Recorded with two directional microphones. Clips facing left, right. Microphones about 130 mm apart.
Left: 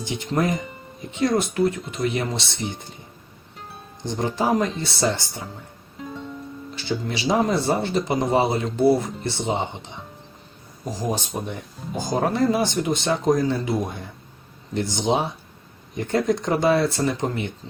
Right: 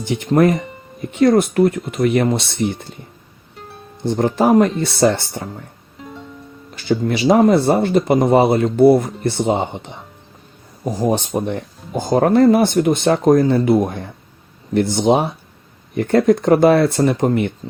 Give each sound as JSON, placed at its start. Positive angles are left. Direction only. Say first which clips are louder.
{"t": 0.2, "sound": "speech", "louder": "right 9 dB", "side_deg": -60}
{"t": 4.0, "sound": "speech", "louder": "right 8 dB", "side_deg": -55}
{"t": 6.7, "sound": "speech", "louder": "right 9 dB", "side_deg": -50}
{"t": 11.0, "sound": "speech", "louder": "right 9 dB", "side_deg": -55}